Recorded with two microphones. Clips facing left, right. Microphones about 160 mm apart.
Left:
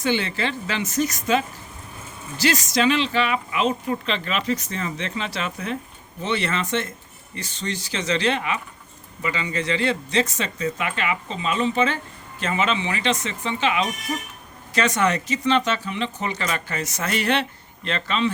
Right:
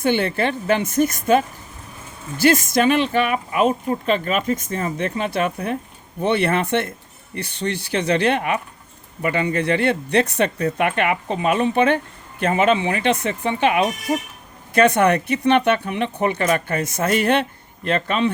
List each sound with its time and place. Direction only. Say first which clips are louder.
0.0 s speech: right 4 dB; 55° right (ahead or behind)